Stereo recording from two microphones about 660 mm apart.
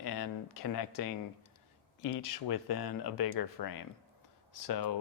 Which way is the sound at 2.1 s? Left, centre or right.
Left.